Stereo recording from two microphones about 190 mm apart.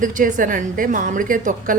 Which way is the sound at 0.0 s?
45° right (ahead or behind).